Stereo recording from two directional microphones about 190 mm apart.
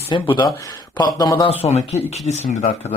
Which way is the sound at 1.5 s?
35° left (ahead or behind).